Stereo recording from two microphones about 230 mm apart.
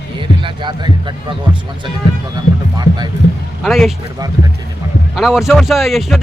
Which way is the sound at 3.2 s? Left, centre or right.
Left.